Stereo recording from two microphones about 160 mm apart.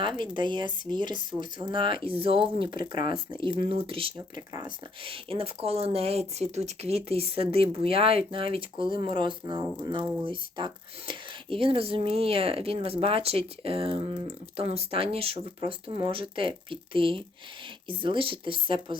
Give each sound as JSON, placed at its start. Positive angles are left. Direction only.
{"t": 0.0, "sound": "speech", "side_deg": -30}
{"t": 4.4, "sound": "speech", "side_deg": -20}
{"t": 5.0, "sound": "speech", "side_deg": -35}